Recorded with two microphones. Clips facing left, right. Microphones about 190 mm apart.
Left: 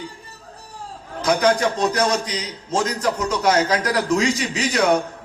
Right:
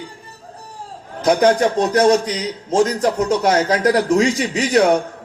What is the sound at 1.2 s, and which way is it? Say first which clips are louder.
A man's voice: right 4 dB; 45° right (ahead or behind).